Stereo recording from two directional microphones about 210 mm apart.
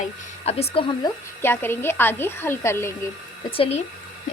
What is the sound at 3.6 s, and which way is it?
Speech, 30° left (ahead or behind).